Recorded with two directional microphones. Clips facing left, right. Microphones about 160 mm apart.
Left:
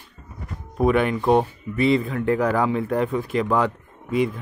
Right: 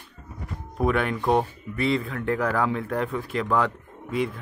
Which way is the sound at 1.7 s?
10° left (ahead or behind).